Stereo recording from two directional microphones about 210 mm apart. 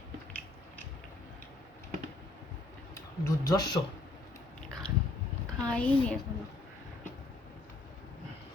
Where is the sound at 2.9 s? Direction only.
15° left (ahead or behind).